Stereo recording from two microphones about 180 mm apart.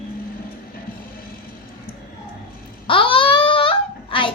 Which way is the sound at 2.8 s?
30° left (ahead or behind).